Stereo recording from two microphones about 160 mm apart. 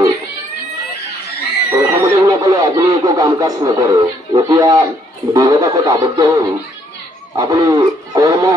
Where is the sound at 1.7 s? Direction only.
20° right (ahead or behind).